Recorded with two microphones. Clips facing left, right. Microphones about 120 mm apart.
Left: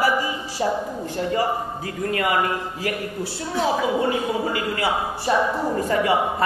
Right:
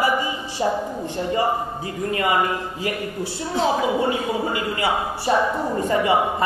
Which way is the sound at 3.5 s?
25° right (ahead or behind).